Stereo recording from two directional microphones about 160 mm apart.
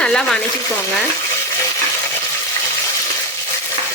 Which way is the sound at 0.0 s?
5° left (ahead or behind).